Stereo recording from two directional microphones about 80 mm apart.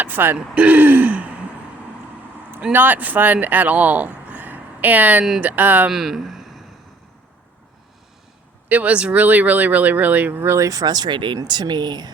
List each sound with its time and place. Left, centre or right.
0.0 s speech: right
2.7 s speech: right
5.9 s speech: centre
8.7 s speech: centre
10.4 s speech: right
11.4 s speech: right